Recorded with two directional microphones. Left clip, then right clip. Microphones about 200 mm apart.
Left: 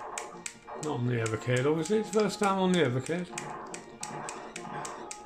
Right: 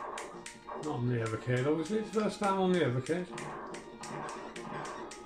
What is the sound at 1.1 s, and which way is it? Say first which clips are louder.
Speech: left 5 dB; 50° left (ahead or behind).